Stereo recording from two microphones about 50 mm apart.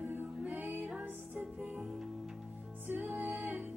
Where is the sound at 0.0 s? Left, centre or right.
Right.